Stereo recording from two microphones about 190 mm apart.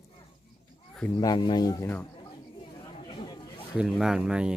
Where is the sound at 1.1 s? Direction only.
20° left (ahead or behind).